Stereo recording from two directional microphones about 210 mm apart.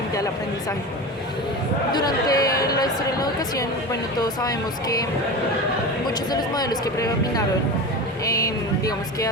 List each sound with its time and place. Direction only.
1.9 s speech: 20° left (ahead or behind)
6.3 s speech: 20° left (ahead or behind)
8.2 s a sound: 15° left (ahead or behind)